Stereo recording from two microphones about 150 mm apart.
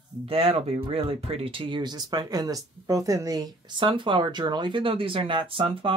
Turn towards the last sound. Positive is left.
turn(degrees=-35)  # may be behind; listen again after turning